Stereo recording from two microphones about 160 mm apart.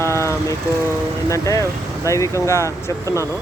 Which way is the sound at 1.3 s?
20° left (ahead or behind).